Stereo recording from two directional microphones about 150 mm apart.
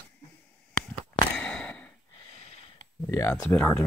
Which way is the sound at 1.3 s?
10° left (ahead or behind).